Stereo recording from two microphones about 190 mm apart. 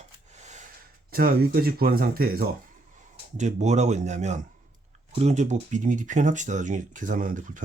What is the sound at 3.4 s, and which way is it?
Speech, 40° right (ahead or behind).